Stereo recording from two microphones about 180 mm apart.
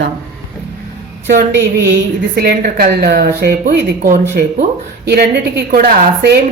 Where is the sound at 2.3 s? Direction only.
60° right (ahead or behind).